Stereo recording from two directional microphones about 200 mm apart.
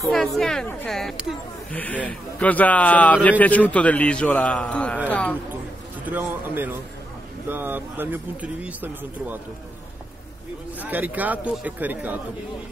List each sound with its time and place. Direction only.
0.0 s speech: centre (ahead or behind)
6.0 s speech: 10° right (ahead or behind)
10.8 s speech: 10° right (ahead or behind)